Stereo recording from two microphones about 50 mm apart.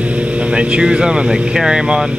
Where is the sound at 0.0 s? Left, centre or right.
Right.